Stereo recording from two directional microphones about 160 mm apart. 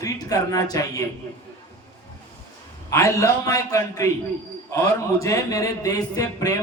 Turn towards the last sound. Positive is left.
turn(degrees=20)  # may be behind; listen again after turning